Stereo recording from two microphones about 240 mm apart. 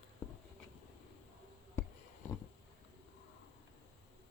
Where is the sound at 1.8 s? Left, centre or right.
Centre.